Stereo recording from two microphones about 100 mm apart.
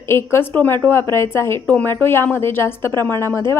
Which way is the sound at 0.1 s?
25° left (ahead or behind).